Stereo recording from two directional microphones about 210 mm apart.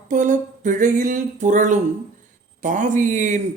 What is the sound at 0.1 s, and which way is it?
Speech, 35° right (ahead or behind).